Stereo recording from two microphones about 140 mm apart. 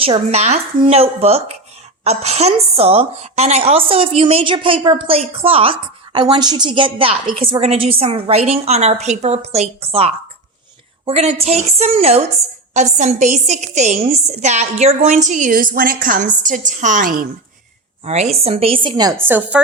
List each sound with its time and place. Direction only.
0.0 s a woman's voice: 45° right (ahead or behind)
6.2 s a woman's voice: 30° right (ahead or behind); by 12.2 s 45° right (ahead or behind)
12.7 s a woman's voice: 60° right (ahead or behind); by 17.2 s 80° right
18.0 s a woman's voice: 50° right (ahead or behind); by 19.1 s 30° right (ahead or behind)
19.1 s a woman's voice: 15° right (ahead or behind)